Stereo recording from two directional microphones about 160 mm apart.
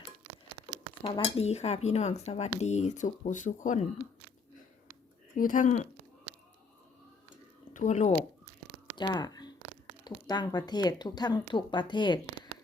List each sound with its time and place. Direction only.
1.0 s speech: 35° left (ahead or behind); by 3.8 s 50° left (ahead or behind)
5.4 s speech: 55° left (ahead or behind)
7.7 s speech: 50° left (ahead or behind)
9.0 s speech: 25° left (ahead or behind)